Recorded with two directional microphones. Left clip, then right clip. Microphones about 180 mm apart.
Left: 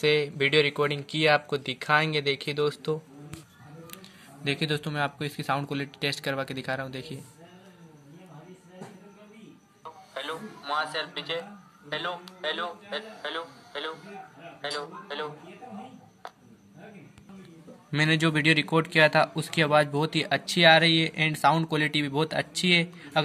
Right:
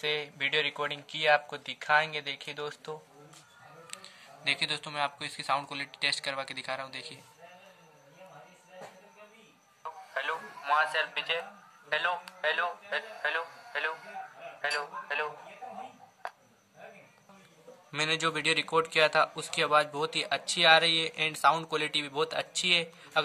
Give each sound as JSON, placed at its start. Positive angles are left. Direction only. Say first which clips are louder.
{"t": 0.0, "sound": "speech", "louder": "left 7 dB", "side_deg": 35}
{"t": 4.5, "sound": "speech", "louder": "left 1 dB", "side_deg": 35}
{"t": 9.8, "sound": "music", "louder": "right 2 dB", "side_deg": 5}
{"t": 13.1, "sound": "speech", "louder": "right 2 dB", "side_deg": 0}
{"t": 17.9, "sound": "a man's voice", "louder": "left 5 dB", "side_deg": 30}